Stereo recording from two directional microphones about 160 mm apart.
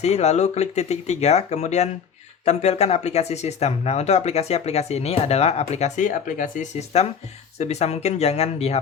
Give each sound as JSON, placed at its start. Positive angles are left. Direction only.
{"t": 0.0, "sound": "speech", "side_deg": 45}
{"t": 6.7, "sound": "speech", "side_deg": 40}